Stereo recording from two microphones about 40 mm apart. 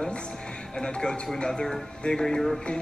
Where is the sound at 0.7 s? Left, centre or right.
Centre.